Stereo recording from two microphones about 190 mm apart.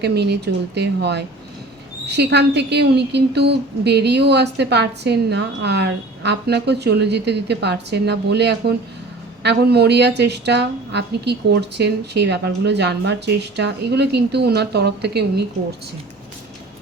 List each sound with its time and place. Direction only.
0.0 s a woman's voice: 60° right (ahead or behind)